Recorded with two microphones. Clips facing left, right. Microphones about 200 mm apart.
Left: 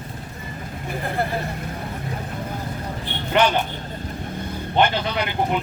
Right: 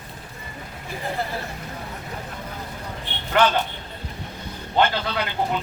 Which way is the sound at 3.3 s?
15° left (ahead or behind).